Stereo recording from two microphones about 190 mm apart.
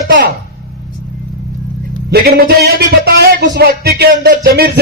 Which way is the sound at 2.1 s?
55° right (ahead or behind).